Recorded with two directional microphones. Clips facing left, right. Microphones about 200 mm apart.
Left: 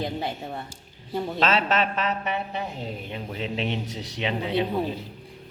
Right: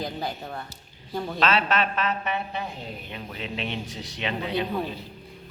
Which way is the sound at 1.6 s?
20° left (ahead or behind).